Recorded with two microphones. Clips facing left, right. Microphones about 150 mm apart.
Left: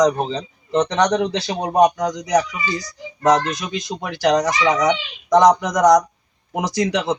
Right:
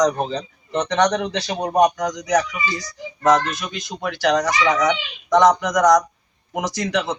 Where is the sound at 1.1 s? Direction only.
25° left (ahead or behind).